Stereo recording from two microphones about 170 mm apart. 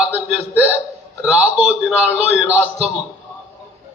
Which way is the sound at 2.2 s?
35° right (ahead or behind).